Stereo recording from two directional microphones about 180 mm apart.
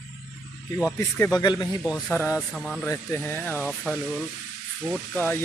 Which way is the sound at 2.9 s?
15° left (ahead or behind).